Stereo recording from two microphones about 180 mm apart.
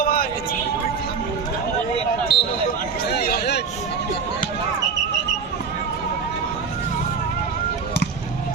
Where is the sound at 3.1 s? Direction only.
55° left (ahead or behind).